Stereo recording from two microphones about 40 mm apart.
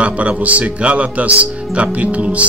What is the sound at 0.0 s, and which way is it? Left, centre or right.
Speech, right.